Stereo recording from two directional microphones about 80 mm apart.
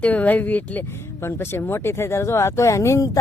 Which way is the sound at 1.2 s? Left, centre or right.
Left.